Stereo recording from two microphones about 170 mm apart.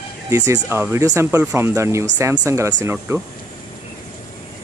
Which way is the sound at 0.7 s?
15° right (ahead or behind).